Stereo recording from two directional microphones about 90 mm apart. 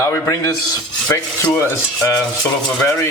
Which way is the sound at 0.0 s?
30° left (ahead or behind).